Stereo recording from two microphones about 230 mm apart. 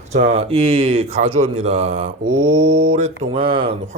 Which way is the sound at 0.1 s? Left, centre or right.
Right.